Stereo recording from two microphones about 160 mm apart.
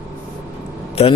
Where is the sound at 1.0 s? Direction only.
40° left (ahead or behind).